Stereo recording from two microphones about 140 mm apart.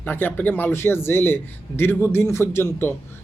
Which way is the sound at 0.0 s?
15° left (ahead or behind).